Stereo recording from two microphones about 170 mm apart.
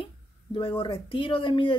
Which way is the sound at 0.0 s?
30° left (ahead or behind).